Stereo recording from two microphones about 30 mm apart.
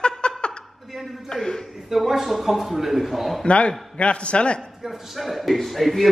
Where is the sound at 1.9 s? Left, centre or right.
Centre.